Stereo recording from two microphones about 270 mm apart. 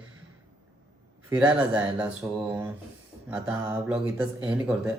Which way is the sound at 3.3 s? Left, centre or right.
Centre.